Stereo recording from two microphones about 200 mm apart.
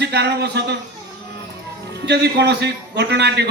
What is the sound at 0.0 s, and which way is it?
Speech, 55° right (ahead or behind).